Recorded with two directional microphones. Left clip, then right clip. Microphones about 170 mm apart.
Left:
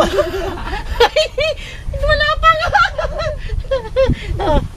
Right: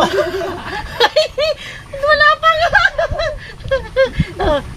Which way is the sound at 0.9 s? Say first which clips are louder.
Even; 35° left (ahead or behind).